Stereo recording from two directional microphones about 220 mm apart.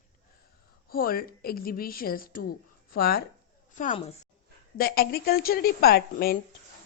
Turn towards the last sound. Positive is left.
turn(degrees=45)  # may be behind; listen again after turning